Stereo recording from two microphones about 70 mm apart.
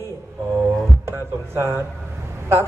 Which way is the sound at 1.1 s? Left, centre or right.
Right.